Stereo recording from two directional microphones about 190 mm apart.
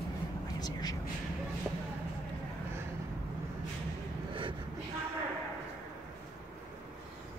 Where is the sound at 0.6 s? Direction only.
20° left (ahead or behind).